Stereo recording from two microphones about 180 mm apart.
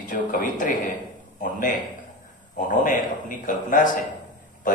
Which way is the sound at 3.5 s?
45° left (ahead or behind).